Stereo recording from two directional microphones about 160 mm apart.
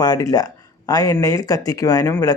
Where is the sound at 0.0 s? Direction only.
25° left (ahead or behind).